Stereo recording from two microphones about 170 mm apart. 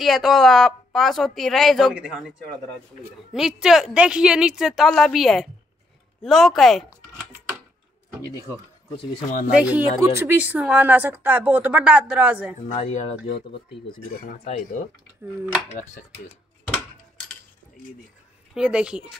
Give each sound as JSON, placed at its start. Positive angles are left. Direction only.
{"t": 0.0, "sound": "speech", "side_deg": 0}
{"t": 3.3, "sound": "speech", "side_deg": -5}
{"t": 9.6, "sound": "speech", "side_deg": -10}
{"t": 12.5, "sound": "speech", "side_deg": 40}
{"t": 18.5, "sound": "speech", "side_deg": -5}